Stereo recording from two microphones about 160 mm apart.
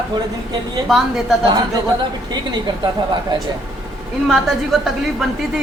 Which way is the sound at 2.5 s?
25° right (ahead or behind).